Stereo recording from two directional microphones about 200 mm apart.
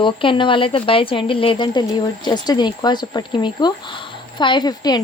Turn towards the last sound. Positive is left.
turn(degrees=20)  # may be behind; listen again after turning